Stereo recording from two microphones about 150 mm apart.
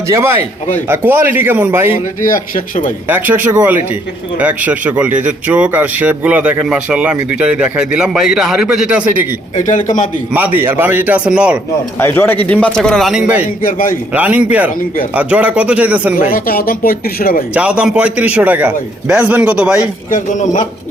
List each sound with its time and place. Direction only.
0.1 s speech: 15° right (ahead or behind)
2.2 s speech: 60° left (ahead or behind)
3.1 s speech: 10° right (ahead or behind)
9.6 s speech: 55° left (ahead or behind)
10.3 s speech: 10° right (ahead or behind)
11.9 s speech: 15° left (ahead or behind); by 13.5 s 10° right (ahead or behind)
13.6 s speech: 65° left (ahead or behind)
14.1 s speech: 10° right (ahead or behind)
16.3 s speech: 75° left (ahead or behind)
17.5 s speech: 10° right (ahead or behind)
20.1 s speech: 55° left (ahead or behind)